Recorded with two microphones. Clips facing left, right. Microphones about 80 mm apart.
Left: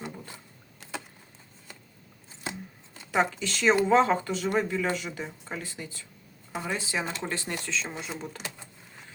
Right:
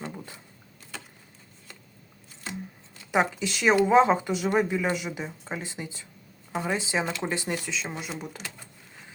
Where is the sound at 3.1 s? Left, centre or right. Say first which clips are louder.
Right 1 dB; centre.